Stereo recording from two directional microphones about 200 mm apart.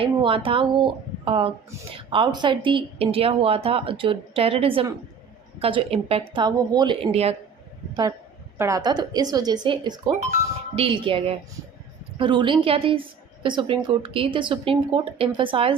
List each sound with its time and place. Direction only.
0.0 s a woman's voice: 25° right (ahead or behind)
8.5 s a woman's voice: 15° right (ahead or behind)